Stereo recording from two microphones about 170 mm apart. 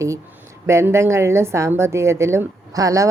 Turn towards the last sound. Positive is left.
turn(degrees=-20)  # may be behind; listen again after turning